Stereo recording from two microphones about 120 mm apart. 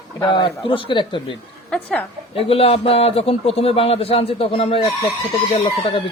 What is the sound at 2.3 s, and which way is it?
A man's voice, 50° left (ahead or behind).